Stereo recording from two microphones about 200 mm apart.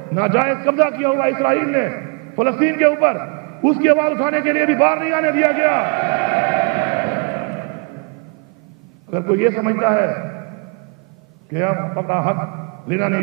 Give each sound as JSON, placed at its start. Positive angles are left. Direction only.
{"t": 0.1, "sound": "a man's voice", "side_deg": -15}
{"t": 9.1, "sound": "a man's voice", "side_deg": -20}
{"t": 11.5, "sound": "a man's voice", "side_deg": -15}